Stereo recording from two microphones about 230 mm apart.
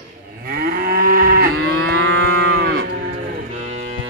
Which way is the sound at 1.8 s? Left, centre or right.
Right.